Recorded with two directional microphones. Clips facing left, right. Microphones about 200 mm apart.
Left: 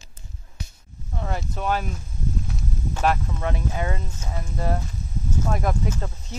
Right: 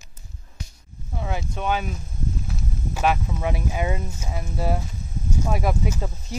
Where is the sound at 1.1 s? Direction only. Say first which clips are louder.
Right 1 dB; 5° right (ahead or behind).